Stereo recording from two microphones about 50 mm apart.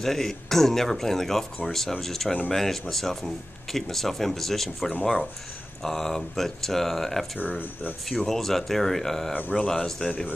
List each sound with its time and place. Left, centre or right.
0.0 s speech: centre
9.5 s speech: centre